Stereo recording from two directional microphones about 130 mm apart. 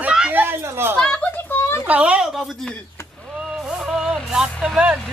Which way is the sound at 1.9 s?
10° right (ahead or behind).